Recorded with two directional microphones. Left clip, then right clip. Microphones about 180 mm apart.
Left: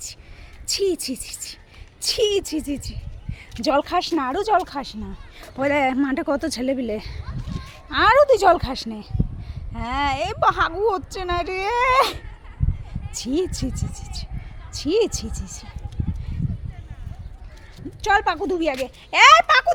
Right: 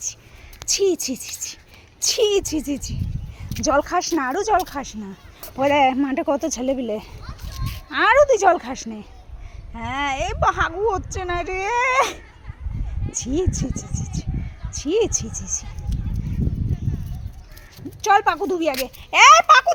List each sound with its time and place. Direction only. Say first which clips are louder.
0.7 s speech: right 3 dB; 15° right (ahead or behind)
3.9 s speech: right 1 dB; centre (ahead or behind)
14.8 s speech: even; 10° left (ahead or behind)
15.1 s speech: right 7 dB; 45° left (ahead or behind)
18.0 s speech: right 2 dB; 10° right (ahead or behind)